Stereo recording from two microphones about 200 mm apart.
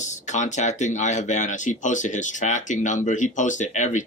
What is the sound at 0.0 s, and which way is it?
Speech, 35° left (ahead or behind).